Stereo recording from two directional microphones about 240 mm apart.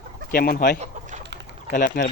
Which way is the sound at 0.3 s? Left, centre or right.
Left.